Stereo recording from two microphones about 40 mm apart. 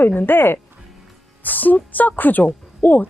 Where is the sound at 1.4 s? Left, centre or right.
Left.